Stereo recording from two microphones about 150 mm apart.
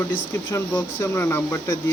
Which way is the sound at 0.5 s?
15° left (ahead or behind).